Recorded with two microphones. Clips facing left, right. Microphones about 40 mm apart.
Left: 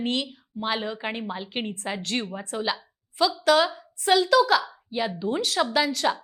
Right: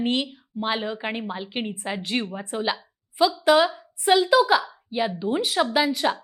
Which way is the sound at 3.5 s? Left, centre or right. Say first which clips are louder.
Right 1 dB; centre.